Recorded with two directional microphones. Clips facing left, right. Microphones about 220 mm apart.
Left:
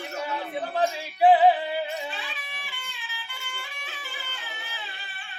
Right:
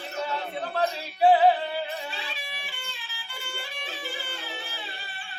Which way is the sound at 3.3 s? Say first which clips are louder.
Right 8 dB; 35° right (ahead or behind).